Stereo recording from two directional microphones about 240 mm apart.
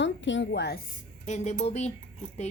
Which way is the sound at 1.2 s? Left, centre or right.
Left.